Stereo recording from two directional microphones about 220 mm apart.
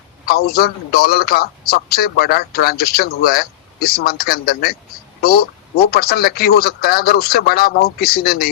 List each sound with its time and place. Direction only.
0.3 s a man's voice: 45° left (ahead or behind)